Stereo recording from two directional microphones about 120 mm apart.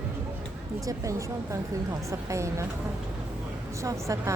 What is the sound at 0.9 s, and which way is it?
Speech, 30° right (ahead or behind).